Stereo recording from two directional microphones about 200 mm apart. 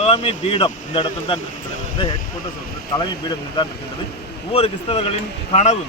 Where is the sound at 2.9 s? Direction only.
20° left (ahead or behind).